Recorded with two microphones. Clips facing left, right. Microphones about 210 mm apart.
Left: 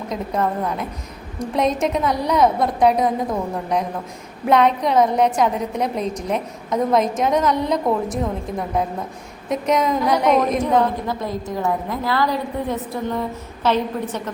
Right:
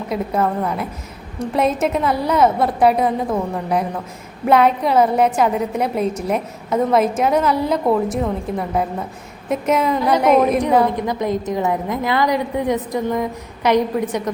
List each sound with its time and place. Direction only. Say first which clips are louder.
0.1 s a woman's voice: right 3 dB; 5° right (ahead or behind)